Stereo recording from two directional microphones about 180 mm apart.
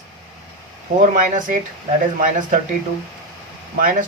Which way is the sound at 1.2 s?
45° right (ahead or behind).